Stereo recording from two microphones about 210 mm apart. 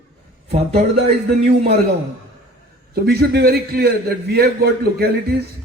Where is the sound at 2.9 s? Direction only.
50° right (ahead or behind).